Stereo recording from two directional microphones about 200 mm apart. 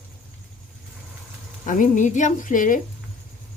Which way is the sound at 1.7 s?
40° left (ahead or behind).